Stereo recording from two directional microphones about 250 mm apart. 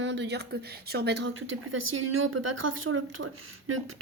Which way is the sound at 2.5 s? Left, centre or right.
Right.